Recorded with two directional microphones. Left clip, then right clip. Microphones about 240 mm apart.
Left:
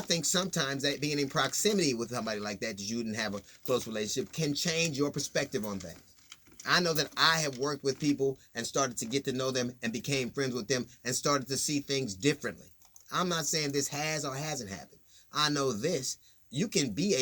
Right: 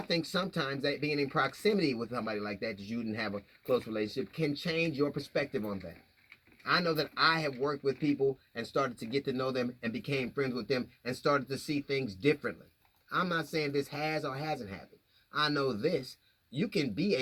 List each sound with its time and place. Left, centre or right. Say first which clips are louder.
0.1 s speech: left 2 dB; centre